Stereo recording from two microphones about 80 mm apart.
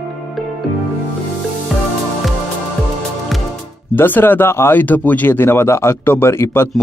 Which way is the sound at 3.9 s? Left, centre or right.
Left.